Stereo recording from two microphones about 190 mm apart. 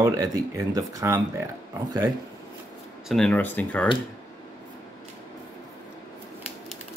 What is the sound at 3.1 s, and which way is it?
Speech, 5° left (ahead or behind).